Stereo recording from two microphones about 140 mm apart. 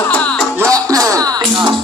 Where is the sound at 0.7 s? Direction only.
25° right (ahead or behind).